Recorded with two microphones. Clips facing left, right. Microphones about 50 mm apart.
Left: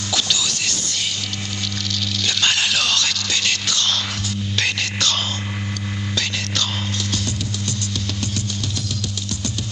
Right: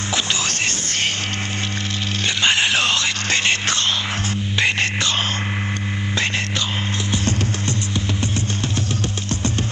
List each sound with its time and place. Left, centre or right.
0.1 s music: right
2.2 s music: right
7.2 s music: right